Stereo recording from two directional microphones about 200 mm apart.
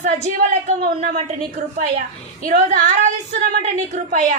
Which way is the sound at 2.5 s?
45° right (ahead or behind).